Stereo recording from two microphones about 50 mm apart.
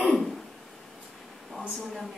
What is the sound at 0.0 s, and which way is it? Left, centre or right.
Throat clearing, centre.